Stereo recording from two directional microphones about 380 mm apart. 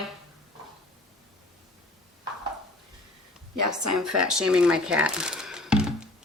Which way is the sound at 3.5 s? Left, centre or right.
Right.